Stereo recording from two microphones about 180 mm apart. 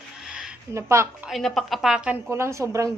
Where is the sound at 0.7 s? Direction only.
15° right (ahead or behind).